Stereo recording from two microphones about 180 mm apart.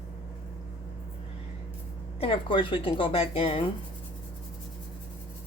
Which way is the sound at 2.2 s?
30° left (ahead or behind).